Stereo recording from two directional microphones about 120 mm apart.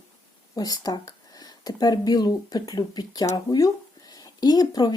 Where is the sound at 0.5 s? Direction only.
30° left (ahead or behind).